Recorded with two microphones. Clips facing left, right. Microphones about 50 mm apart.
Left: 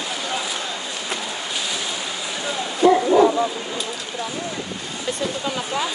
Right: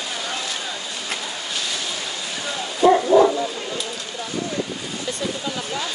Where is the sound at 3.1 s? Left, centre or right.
Centre.